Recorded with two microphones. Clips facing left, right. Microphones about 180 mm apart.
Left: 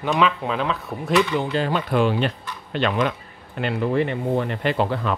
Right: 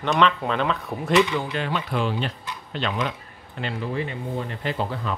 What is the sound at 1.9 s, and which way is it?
Speech, 60° left (ahead or behind).